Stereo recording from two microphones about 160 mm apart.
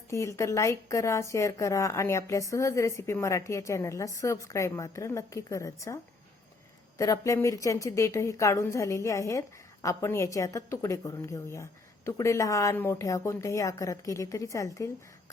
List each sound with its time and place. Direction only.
0.1 s a woman's voice: 20° left (ahead or behind)
7.0 s a woman's voice: 20° left (ahead or behind)